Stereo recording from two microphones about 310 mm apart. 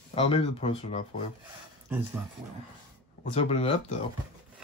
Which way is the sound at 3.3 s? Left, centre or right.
Centre.